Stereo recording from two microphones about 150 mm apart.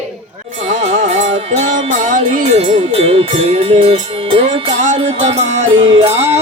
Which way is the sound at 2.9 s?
40° right (ahead or behind).